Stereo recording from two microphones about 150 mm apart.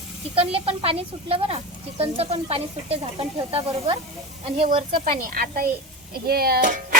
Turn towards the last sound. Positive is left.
turn(degrees=-65)  # may be behind; listen again after turning